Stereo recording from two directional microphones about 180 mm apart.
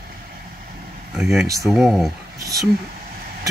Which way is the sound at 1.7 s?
Centre (ahead or behind).